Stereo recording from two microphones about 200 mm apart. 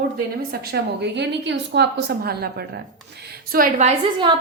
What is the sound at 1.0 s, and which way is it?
A woman's voice, 60° right (ahead or behind).